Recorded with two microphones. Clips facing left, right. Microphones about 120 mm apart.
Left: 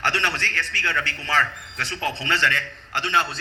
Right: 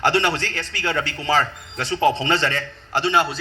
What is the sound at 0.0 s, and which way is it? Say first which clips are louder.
A man's voice: right 6 dB; 15° right (ahead or behind).